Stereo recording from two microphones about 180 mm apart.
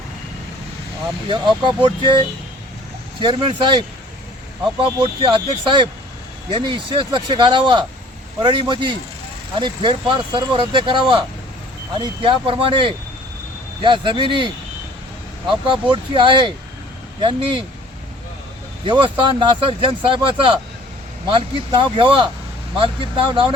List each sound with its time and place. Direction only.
1.3 s speech: 25° right (ahead or behind)
18.9 s speech: 25° right (ahead or behind)